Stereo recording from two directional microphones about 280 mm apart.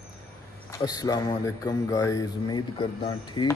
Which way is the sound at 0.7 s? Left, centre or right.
Centre.